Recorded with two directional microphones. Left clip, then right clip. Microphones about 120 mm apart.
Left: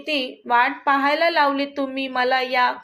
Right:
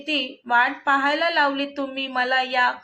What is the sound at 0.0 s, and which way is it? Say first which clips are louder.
A woman's voice: left 1 dB; 35° left (ahead or behind).